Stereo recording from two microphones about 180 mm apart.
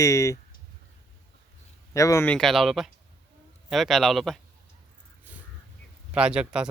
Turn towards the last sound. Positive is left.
turn(degrees=-5)  # may be behind; listen again after turning